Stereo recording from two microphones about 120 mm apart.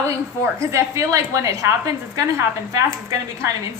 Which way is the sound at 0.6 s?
25° right (ahead or behind).